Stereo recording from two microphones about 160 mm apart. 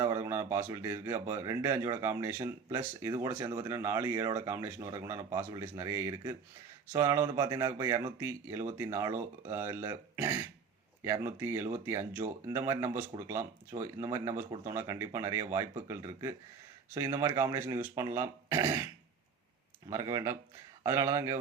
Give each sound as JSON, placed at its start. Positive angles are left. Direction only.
{"t": 0.0, "sound": "speech", "side_deg": -15}
{"t": 19.9, "sound": "speech", "side_deg": -20}